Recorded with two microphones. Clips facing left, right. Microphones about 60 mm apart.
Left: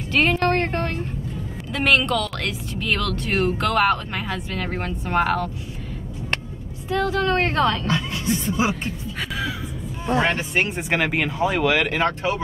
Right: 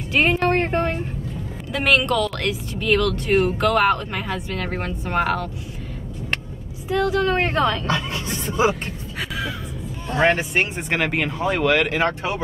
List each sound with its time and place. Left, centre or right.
0.1 s music: centre
1.7 s speech: centre
6.9 s speech: centre
7.8 s a woman's voice: right
10.2 s speech: centre